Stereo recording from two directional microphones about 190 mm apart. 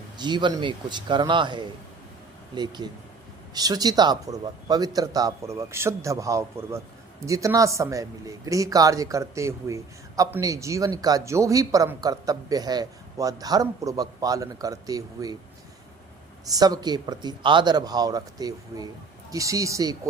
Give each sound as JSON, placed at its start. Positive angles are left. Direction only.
{"t": 0.2, "sound": "speech", "side_deg": -25}
{"t": 16.5, "sound": "speech", "side_deg": -20}